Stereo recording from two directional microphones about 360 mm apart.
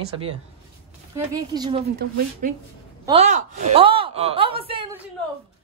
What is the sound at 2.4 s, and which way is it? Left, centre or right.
A woman's voice, right.